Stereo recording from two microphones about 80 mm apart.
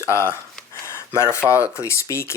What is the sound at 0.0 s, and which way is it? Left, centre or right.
Speech, left.